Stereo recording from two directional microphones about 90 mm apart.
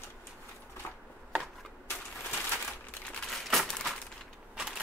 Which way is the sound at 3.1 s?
5° left (ahead or behind).